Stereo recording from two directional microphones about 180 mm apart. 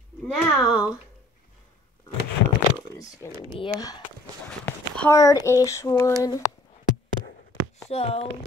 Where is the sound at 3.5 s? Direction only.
25° left (ahead or behind).